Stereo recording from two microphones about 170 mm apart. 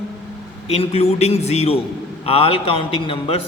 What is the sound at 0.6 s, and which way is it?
A man's voice, 35° left (ahead or behind).